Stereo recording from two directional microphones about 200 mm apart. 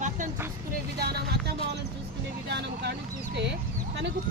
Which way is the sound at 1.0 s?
55° right (ahead or behind).